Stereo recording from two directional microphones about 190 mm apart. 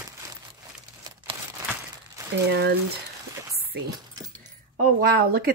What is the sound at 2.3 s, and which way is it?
Speech, 60° right (ahead or behind).